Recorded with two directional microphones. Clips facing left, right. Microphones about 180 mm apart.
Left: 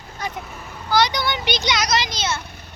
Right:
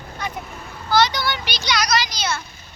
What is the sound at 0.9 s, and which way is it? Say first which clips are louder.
A child's voice: right 1 dB; 15° left (ahead or behind).